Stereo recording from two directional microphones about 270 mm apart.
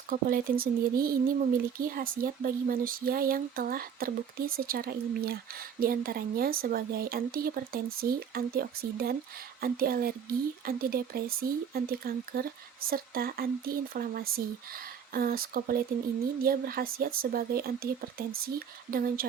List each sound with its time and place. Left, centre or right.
0.1 s speech: right